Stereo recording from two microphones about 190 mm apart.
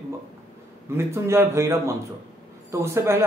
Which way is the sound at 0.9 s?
15° right (ahead or behind).